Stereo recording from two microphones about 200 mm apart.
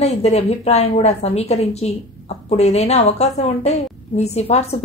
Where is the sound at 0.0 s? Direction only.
30° left (ahead or behind).